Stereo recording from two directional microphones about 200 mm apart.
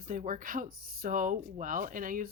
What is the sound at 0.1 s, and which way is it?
Speech, 40° right (ahead or behind).